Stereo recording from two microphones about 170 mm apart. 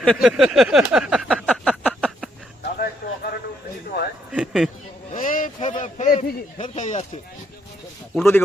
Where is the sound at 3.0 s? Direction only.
65° left (ahead or behind).